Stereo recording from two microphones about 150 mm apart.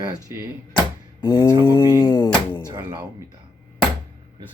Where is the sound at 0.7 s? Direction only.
30° left (ahead or behind).